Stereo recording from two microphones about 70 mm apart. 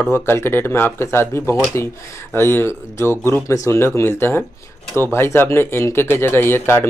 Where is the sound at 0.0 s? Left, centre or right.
Left.